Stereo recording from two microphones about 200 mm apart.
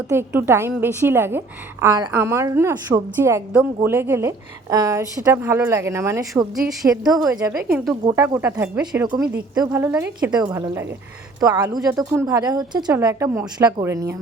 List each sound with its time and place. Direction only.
0.1 s a woman's voice: 10° right (ahead or behind)
7.5 s a woman's voice: 5° right (ahead or behind)